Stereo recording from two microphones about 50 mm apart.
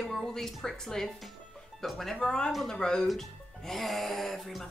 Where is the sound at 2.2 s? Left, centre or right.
Centre.